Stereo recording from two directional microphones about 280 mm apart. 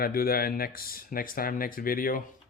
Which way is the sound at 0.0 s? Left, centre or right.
Left.